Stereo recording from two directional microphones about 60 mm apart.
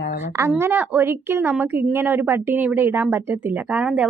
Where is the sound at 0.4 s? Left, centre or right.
Right.